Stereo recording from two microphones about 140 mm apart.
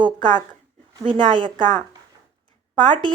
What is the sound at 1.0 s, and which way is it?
Speech, 35° right (ahead or behind).